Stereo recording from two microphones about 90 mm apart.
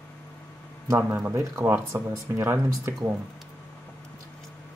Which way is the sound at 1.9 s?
35° right (ahead or behind).